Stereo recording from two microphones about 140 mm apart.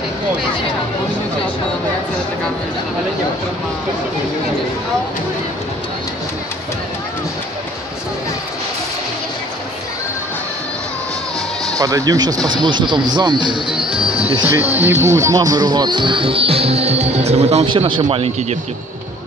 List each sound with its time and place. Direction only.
11.6 s speech: 25° right (ahead or behind)
13.9 s music: 40° right (ahead or behind)
14.4 s speech: 15° right (ahead or behind); by 17.6 s 50° right (ahead or behind)
17.6 s speech: 35° right (ahead or behind)
18.0 s speech: 50° right (ahead or behind)